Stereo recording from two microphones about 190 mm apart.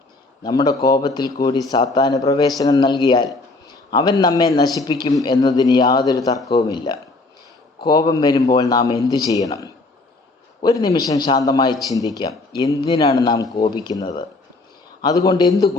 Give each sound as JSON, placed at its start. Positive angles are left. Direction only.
{"t": 0.4, "sound": "a man's voice", "side_deg": 20}